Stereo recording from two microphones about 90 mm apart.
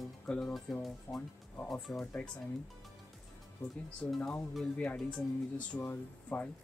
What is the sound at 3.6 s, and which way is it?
Speech, 35° left (ahead or behind).